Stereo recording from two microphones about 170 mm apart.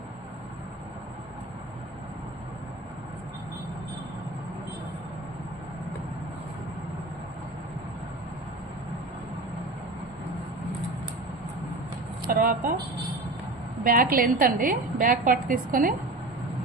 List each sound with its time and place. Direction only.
12.3 s a woman's voice: 55° right (ahead or behind)
13.8 s a woman's voice: 55° right (ahead or behind)